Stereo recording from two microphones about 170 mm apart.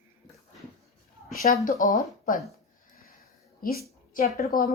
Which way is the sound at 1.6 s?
50° left (ahead or behind).